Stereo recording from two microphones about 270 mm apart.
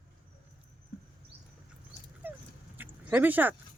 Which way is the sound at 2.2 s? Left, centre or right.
Centre.